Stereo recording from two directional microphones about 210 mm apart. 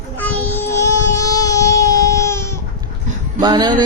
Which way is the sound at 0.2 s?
10° left (ahead or behind).